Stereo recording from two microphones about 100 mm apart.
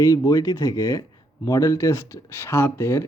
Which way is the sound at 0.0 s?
35° left (ahead or behind).